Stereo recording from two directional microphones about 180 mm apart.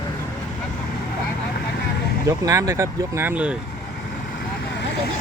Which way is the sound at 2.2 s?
20° right (ahead or behind).